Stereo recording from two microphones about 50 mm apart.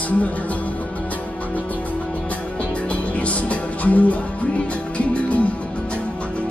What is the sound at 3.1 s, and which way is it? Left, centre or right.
Music, left.